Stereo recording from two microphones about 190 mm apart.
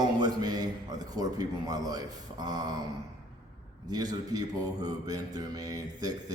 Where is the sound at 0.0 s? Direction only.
20° right (ahead or behind).